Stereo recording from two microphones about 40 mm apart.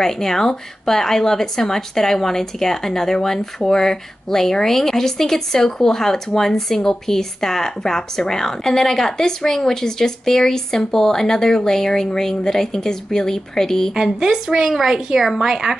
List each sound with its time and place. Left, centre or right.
0.0 s speech: centre
13.9 s a woman's voice: centre